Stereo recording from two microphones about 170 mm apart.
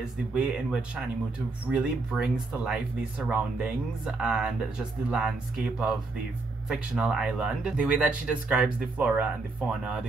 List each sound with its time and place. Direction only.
0.3 s speech: 5° right (ahead or behind)